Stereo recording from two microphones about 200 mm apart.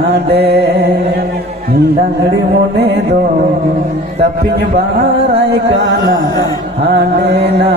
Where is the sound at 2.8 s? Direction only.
55° right (ahead or behind).